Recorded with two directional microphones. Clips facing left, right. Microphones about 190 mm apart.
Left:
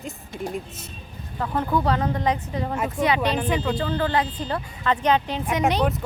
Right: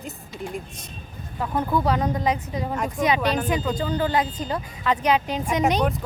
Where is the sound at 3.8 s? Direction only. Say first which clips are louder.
Even; 15° right (ahead or behind).